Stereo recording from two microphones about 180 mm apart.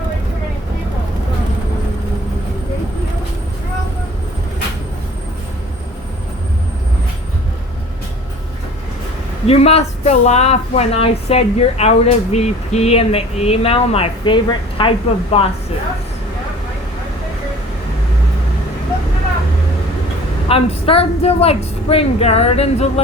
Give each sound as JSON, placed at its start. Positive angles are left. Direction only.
{"t": 9.5, "sound": "speech", "side_deg": 35}
{"t": 20.5, "sound": "speech", "side_deg": 30}